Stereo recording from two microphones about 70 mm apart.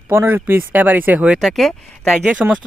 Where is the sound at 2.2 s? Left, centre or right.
Centre.